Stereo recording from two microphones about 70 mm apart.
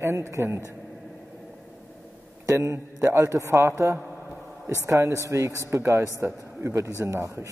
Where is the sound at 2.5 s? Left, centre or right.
Right.